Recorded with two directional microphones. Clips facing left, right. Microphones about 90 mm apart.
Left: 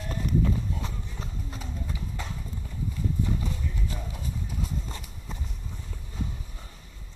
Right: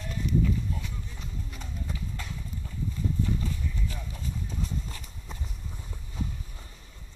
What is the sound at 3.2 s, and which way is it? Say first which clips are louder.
Clip-clop: even; 20° left (ahead or behind).